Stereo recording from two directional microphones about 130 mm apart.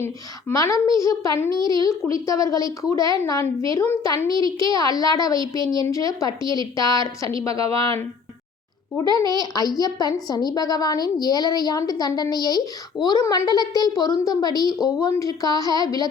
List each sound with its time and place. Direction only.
0.0 s a woman's voice: 20° left (ahead or behind)
7.6 s speech: 45° right (ahead or behind)
9.1 s a woman's voice: 30° left (ahead or behind)
14.8 s speech: 5° right (ahead or behind)
15.0 s a woman's voice: 25° left (ahead or behind)